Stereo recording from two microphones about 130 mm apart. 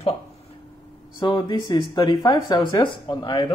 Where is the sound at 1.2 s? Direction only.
35° left (ahead or behind).